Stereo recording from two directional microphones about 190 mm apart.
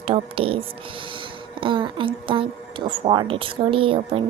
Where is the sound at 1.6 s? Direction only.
25° right (ahead or behind).